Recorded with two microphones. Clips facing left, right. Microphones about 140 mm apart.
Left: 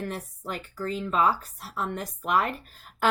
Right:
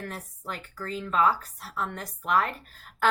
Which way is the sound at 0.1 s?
20° left (ahead or behind).